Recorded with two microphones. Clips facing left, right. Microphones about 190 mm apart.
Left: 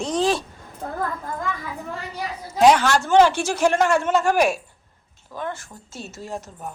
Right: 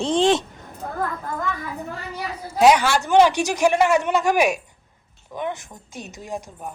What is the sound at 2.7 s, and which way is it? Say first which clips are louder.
A man's voice: even; 10° right (ahead or behind).